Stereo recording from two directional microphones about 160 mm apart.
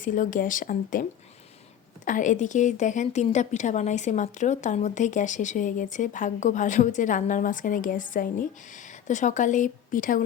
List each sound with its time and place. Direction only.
0.0 s speech: 55° left (ahead or behind)
2.0 s a woman's voice: 50° left (ahead or behind)